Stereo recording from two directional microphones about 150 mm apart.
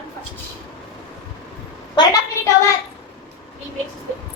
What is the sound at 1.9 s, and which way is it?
Speech, 25° left (ahead or behind).